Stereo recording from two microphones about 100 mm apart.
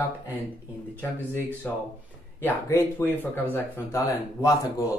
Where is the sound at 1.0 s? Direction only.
20° left (ahead or behind).